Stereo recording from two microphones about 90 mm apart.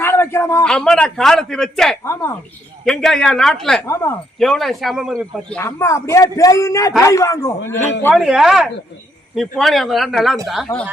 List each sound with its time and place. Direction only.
0.0 s a sound: 25° left (ahead or behind)
0.6 s a man's voice: 10° left (ahead or behind)
3.8 s speech: 30° left (ahead or behind)
4.4 s a man's voice: centre (ahead or behind)
5.6 s a man's voice: 30° left (ahead or behind)
8.1 s a man's voice: centre (ahead or behind)